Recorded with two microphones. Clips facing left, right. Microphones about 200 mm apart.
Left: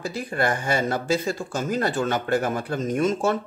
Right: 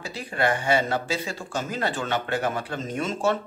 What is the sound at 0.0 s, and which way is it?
Speech, 45° left (ahead or behind).